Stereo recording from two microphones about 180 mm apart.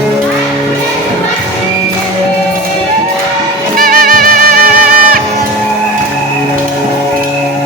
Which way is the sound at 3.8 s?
55° right (ahead or behind).